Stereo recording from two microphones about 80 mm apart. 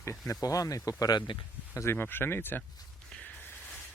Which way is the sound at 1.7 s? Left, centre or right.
Left.